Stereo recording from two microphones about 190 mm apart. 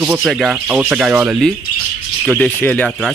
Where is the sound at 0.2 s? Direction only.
Centre (ahead or behind).